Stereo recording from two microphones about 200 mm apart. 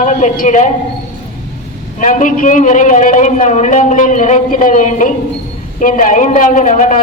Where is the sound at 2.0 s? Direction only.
40° left (ahead or behind).